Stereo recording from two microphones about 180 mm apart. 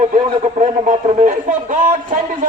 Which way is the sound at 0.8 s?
45° right (ahead or behind).